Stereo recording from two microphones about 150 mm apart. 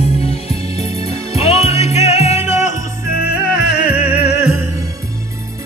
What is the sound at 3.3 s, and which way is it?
Music, 90° left.